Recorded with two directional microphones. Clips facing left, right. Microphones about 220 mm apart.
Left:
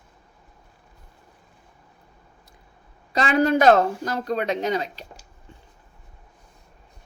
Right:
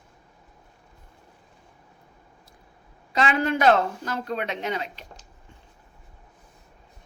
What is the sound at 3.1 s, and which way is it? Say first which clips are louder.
Speech: left 4 dB; 40° left (ahead or behind).